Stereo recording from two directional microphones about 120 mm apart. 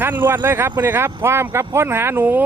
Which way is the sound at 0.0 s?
20° right (ahead or behind).